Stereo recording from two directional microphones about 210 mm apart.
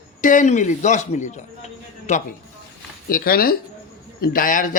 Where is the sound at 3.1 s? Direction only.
45° left (ahead or behind).